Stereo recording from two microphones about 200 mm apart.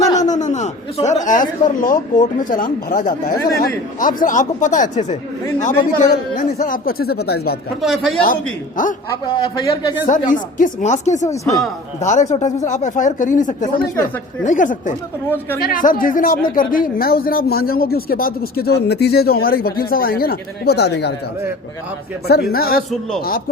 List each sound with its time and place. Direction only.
0.2 s a man's voice: 35° left (ahead or behind); by 7.5 s 55° left (ahead or behind)
7.8 s speech: centre (ahead or behind)
8.8 s speech: 40° left (ahead or behind)
9.2 s speech: 25° left (ahead or behind)
10.2 s a man's voice: 40° left (ahead or behind); by 21.1 s 55° left (ahead or behind)
22.3 s speech: 50° left (ahead or behind)